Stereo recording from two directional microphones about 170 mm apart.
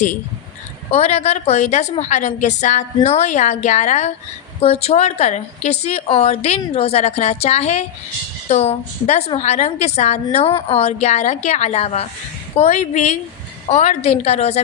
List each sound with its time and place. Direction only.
0.9 s a woman's voice: 40° left (ahead or behind)